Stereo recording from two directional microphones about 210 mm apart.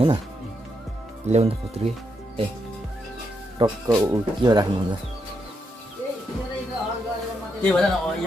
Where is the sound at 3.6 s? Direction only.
25° right (ahead or behind).